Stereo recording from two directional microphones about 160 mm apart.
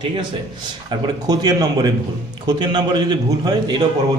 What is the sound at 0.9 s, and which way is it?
A man's voice, 25° right (ahead or behind).